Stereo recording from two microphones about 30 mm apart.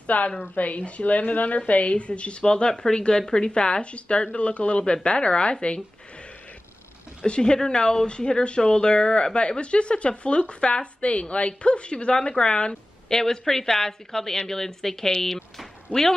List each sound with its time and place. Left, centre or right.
0.0 s a woman's voice: left
1.7 s speech: left
2.4 s speech: left
4.9 s speech: left
7.2 s speech: left
13.1 s a woman's voice: centre